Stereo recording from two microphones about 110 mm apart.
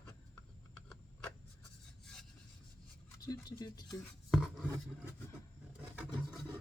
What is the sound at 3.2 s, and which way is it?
Speech, 35° left (ahead or behind).